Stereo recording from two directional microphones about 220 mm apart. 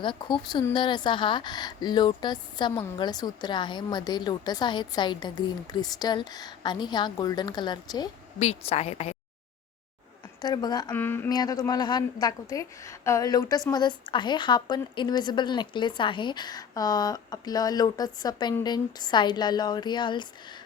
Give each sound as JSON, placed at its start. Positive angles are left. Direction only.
{"t": 0.0, "sound": "a woman's voice", "side_deg": 20}
{"t": 8.4, "sound": "a woman's voice", "side_deg": 30}
{"t": 10.4, "sound": "a woman's voice", "side_deg": 20}